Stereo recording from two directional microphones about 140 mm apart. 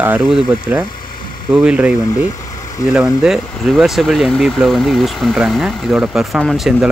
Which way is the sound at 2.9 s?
5° right (ahead or behind).